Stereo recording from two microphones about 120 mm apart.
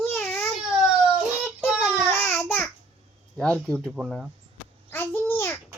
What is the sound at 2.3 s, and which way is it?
Babbling, 20° left (ahead or behind).